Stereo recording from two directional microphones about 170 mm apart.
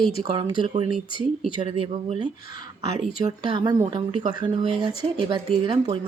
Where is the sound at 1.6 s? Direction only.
35° right (ahead or behind).